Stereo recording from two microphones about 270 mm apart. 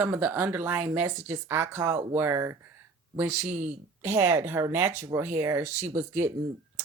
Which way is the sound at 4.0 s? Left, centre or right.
Centre.